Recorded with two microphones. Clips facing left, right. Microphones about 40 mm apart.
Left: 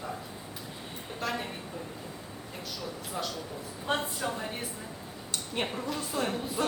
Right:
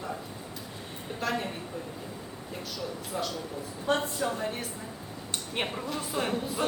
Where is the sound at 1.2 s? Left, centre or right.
Centre.